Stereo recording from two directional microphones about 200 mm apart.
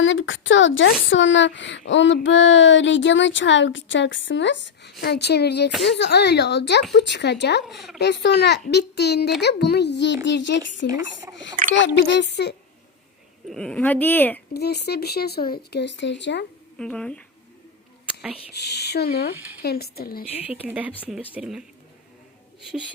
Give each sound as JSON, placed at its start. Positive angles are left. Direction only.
{"t": 0.0, "sound": "a woman's voice", "side_deg": 70}
{"t": 7.6, "sound": "a woman's voice", "side_deg": 0}
{"t": 7.9, "sound": "speech", "side_deg": 55}
{"t": 13.5, "sound": "speech", "side_deg": 5}
{"t": 14.5, "sound": "speech", "side_deg": 55}
{"t": 16.7, "sound": "a woman's voice", "side_deg": 5}
{"t": 18.5, "sound": "speech", "side_deg": 55}
{"t": 20.5, "sound": "speech", "side_deg": -10}